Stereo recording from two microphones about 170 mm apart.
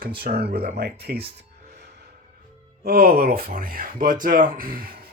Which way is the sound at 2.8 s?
65° right (ahead or behind).